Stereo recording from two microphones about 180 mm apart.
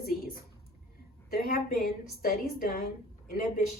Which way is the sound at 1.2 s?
55° left (ahead or behind).